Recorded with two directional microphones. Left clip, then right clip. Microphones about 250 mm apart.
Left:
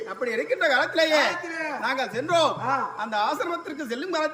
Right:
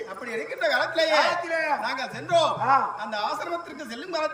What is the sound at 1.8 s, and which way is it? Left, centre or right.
A woman's voice, centre.